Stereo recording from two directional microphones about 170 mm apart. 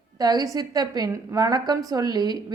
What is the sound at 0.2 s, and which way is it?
A woman's voice, 20° right (ahead or behind).